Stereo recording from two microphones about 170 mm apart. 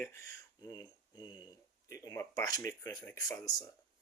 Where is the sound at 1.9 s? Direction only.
20° left (ahead or behind).